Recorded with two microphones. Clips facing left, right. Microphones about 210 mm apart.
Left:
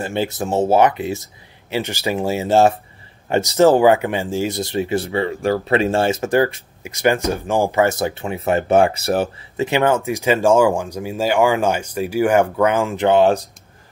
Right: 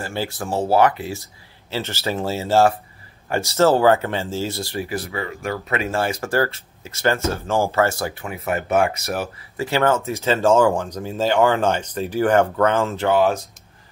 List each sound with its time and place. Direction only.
0.0 s speech: 20° left (ahead or behind)